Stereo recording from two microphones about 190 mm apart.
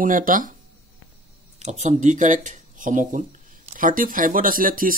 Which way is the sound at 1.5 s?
35° right (ahead or behind).